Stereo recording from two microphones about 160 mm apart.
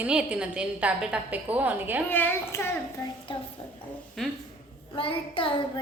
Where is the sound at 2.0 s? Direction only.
10° left (ahead or behind).